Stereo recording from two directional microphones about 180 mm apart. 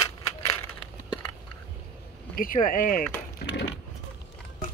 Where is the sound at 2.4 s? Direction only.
50° left (ahead or behind).